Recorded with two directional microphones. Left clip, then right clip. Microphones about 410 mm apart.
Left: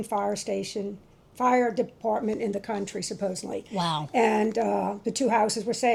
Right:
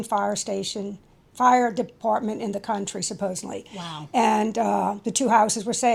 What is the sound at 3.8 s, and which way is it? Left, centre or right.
Speech, left.